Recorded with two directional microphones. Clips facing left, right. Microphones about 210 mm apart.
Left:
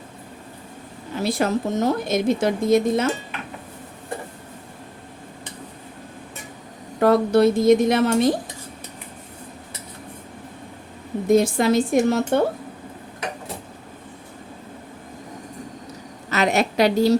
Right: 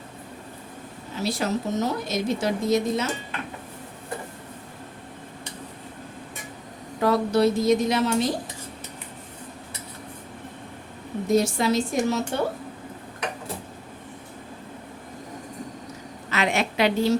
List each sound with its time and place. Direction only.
1.1 s a woman's voice: 55° left (ahead or behind)
7.0 s a woman's voice: 50° left (ahead or behind)
11.3 s a woman's voice: 55° left (ahead or behind)
16.3 s a woman's voice: 40° left (ahead or behind)